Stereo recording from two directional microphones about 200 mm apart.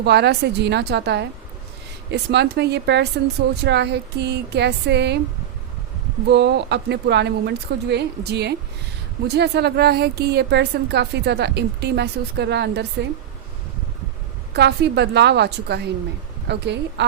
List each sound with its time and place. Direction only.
0.0 s a woman's voice: 55° right (ahead or behind)
6.2 s a woman's voice: 60° right (ahead or behind)
14.5 s a woman's voice: 55° right (ahead or behind)